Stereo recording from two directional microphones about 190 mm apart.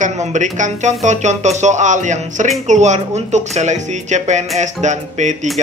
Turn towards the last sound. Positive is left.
turn(degrees=-40)  # may be behind; listen again after turning